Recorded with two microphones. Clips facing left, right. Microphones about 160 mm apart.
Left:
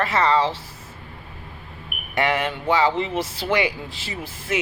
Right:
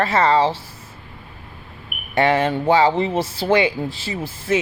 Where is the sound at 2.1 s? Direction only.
30° right (ahead or behind).